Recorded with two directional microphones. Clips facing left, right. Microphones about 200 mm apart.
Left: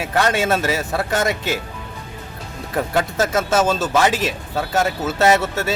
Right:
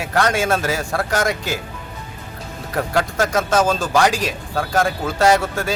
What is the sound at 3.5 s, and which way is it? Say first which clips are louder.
Speech: right 1 dB; 5° left (ahead or behind).